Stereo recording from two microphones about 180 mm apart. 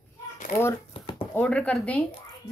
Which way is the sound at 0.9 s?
30° left (ahead or behind).